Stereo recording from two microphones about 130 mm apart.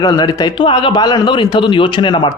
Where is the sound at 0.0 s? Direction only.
30° left (ahead or behind).